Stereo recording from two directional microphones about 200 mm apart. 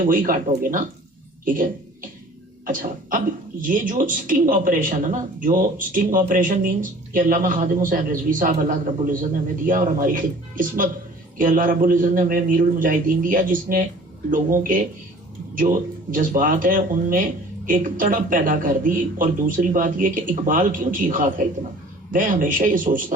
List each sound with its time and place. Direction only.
0.0 s speech: 40° right (ahead or behind)
9.6 s speech: 40° right (ahead or behind)
16.1 s a man's voice: 40° right (ahead or behind)